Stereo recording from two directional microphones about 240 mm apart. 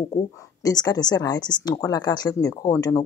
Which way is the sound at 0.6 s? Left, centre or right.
Centre.